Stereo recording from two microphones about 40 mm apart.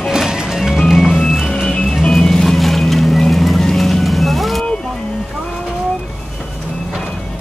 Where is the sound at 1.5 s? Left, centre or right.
Centre.